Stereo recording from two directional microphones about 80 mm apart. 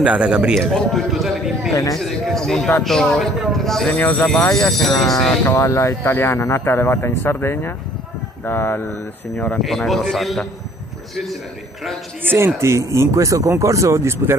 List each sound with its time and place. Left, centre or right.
0.0 s a man's voice: centre
0.6 s speech: centre
1.7 s speech: left
2.0 s a man's voice: centre
3.9 s speech: left
4.6 s speech: centre
5.5 s speech: left
6.1 s speech: left
9.6 s speech: centre
12.5 s speech: right